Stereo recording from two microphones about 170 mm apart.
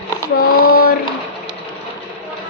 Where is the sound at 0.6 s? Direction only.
60° left (ahead or behind).